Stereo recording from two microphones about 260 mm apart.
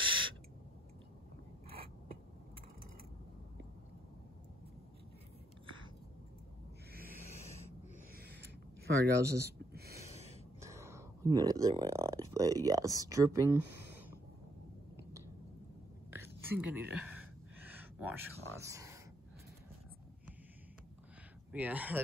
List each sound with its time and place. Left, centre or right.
0.0 s owl: right
8.2 s a sound: right
10.6 s speech: centre
16.1 s whispering: centre
17.6 s a sound: centre
18.6 s speech: centre
21.5 s speech: centre